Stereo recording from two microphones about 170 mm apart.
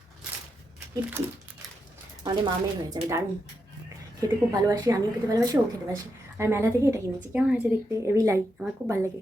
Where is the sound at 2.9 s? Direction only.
20° right (ahead or behind).